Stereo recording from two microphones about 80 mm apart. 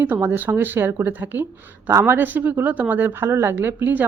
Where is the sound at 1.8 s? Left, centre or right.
Right.